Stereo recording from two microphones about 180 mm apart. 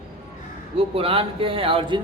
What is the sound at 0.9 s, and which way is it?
A man's voice, 30° right (ahead or behind).